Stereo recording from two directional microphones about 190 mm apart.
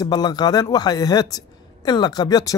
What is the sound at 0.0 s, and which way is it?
A man's voice, 20° left (ahead or behind).